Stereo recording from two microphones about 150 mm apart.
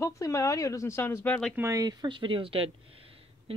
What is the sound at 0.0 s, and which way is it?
Speech, 20° left (ahead or behind).